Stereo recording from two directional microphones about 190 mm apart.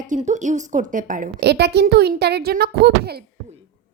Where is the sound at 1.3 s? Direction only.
60° right (ahead or behind).